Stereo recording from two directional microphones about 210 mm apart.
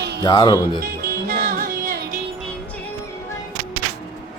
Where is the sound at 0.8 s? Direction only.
45° right (ahead or behind).